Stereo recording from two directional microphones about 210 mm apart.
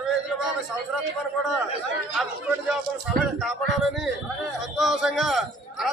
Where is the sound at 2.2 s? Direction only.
Centre (ahead or behind).